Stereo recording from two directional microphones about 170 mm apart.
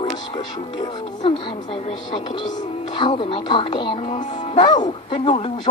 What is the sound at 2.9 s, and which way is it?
Speech, 30° left (ahead or behind).